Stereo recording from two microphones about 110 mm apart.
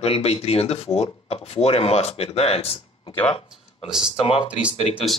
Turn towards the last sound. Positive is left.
turn(degrees=60)  # may be behind; listen again after turning